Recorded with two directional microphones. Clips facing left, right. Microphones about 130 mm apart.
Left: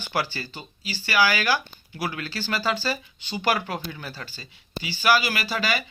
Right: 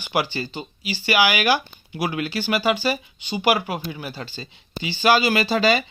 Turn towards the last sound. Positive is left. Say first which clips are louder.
# right 8 dB
turn(degrees=-25)  # may be behind; listen again after turning